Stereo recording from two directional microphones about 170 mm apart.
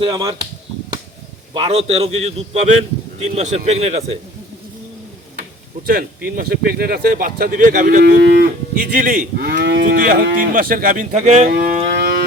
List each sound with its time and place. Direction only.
0.0 s speech: 25° right (ahead or behind)
1.5 s a man's voice: 35° right (ahead or behind)
5.8 s speech: 60° right (ahead or behind)
8.0 s cattle: 75° right (ahead or behind)
8.7 s speech: 50° right (ahead or behind); by 9.8 s 85° right
9.8 s speech: 55° right (ahead or behind)